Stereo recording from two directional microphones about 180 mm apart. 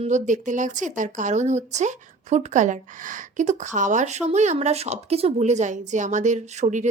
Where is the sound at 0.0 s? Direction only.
45° right (ahead or behind).